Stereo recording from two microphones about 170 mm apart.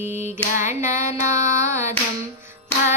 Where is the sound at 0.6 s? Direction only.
50° left (ahead or behind).